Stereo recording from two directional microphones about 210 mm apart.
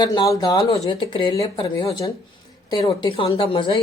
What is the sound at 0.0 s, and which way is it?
A woman's voice, 20° left (ahead or behind).